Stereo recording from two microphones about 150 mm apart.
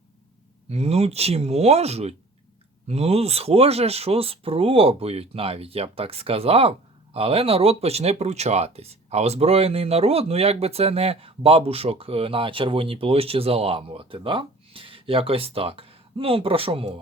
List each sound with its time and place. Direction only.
0.7 s speech: 45° right (ahead or behind)